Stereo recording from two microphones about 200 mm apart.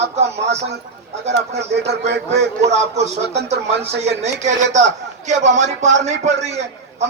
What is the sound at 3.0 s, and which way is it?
A man's voice, 35° right (ahead or behind).